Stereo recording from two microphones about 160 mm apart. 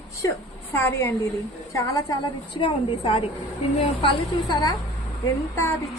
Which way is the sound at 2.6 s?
35° left (ahead or behind).